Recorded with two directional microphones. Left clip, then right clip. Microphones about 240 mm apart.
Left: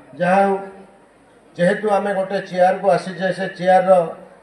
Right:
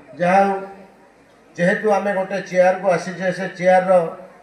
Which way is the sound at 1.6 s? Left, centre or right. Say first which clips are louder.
Even; left.